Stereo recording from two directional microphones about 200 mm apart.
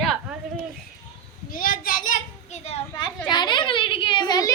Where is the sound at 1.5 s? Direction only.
45° left (ahead or behind).